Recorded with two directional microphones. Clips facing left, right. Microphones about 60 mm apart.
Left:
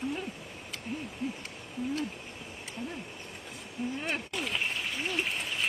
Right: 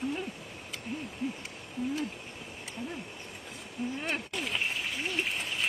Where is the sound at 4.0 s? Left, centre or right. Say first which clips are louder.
Even; centre.